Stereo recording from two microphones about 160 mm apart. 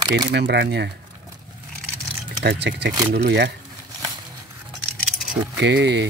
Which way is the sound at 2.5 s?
90° right.